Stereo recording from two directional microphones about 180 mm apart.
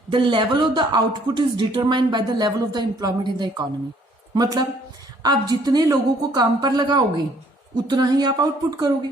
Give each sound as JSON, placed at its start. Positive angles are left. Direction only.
{"t": 0.1, "sound": "speech", "side_deg": -25}